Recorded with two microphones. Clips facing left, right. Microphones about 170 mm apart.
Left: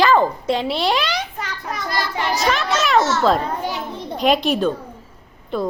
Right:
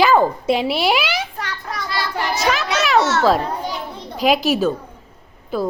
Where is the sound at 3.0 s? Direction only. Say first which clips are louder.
Right 1 dB; 65° right (ahead or behind).